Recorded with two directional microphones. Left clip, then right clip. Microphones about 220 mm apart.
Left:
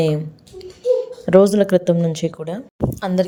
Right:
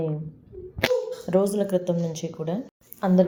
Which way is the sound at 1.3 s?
45° left (ahead or behind).